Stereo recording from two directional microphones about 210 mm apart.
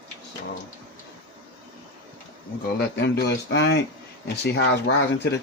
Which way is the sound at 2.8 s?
55° left (ahead or behind).